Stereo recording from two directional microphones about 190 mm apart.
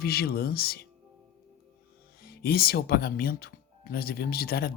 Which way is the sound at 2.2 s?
55° left (ahead or behind).